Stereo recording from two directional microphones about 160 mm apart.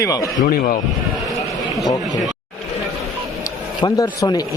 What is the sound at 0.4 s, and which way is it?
Speech, 60° left (ahead or behind).